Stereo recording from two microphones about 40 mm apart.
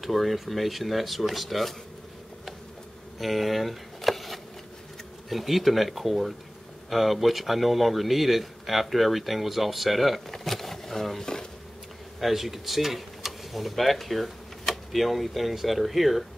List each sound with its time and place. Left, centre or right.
0.0 s speech: centre
3.2 s a sound: centre
5.3 s speech: centre
12.2 s speech: centre